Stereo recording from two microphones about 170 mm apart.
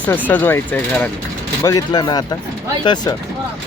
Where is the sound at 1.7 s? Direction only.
25° left (ahead or behind).